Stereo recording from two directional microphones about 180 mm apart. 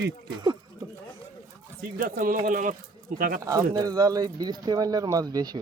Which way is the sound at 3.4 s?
20° right (ahead or behind).